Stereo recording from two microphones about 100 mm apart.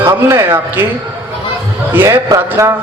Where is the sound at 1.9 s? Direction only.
20° right (ahead or behind).